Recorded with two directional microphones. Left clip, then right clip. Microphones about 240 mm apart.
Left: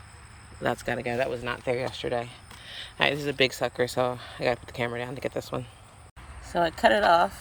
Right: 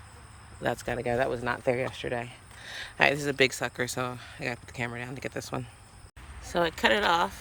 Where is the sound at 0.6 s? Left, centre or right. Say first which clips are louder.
Left 2 dB; centre.